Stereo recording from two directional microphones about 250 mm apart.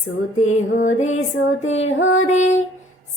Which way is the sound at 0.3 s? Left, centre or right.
Left.